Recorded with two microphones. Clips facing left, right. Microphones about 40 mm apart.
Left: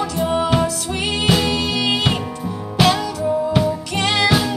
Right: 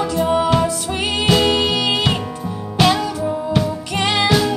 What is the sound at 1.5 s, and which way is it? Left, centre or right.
Music, centre.